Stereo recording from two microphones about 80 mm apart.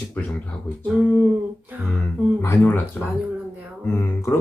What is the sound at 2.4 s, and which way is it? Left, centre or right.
Speech, left.